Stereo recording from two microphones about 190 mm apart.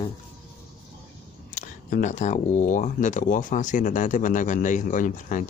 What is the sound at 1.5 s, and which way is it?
Speech, 40° left (ahead or behind).